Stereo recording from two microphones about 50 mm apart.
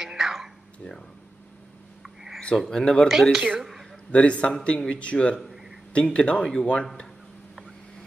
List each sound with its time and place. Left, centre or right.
0.0 s whispering: centre
2.0 s a sound: centre
2.7 s speech: centre
3.1 s speech: centre
4.1 s speech: left